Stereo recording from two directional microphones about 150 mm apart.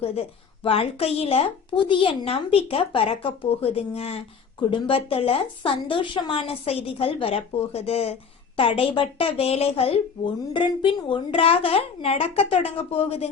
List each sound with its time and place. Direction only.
0.0 s a woman's voice: 40° left (ahead or behind)